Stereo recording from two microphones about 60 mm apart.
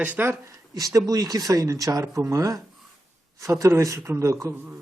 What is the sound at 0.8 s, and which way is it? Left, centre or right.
Speech, right.